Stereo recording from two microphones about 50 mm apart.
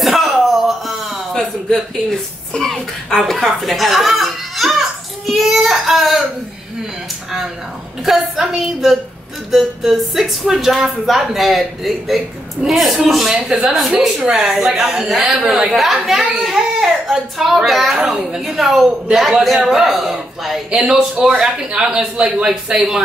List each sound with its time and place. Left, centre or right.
0.0 s a sound: centre
8.0 s a woman's voice: centre
18.0 s a man's voice: centre